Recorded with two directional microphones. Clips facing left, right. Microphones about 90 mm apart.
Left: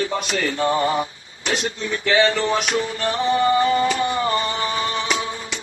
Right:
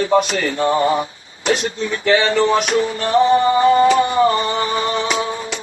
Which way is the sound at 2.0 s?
40° right (ahead or behind).